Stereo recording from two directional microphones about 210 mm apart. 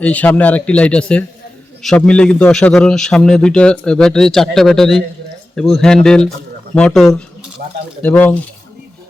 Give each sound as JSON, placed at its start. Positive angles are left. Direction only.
{"t": 0.0, "sound": "a man's voice", "side_deg": 5}
{"t": 7.6, "sound": "speech", "side_deg": -45}
{"t": 8.0, "sound": "speech", "side_deg": 10}